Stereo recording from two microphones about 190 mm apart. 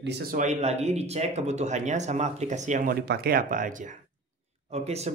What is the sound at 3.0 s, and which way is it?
Speech, 55° right (ahead or behind).